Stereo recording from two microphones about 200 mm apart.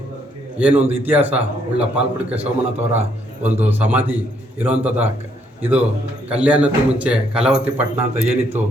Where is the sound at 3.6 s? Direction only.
10° right (ahead or behind).